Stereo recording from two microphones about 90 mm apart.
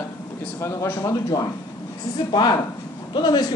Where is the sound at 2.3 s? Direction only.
55° left (ahead or behind).